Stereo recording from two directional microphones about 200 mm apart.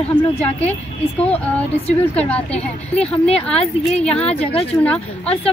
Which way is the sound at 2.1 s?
5° left (ahead or behind).